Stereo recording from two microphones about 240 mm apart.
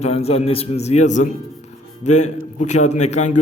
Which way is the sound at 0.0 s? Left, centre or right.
Left.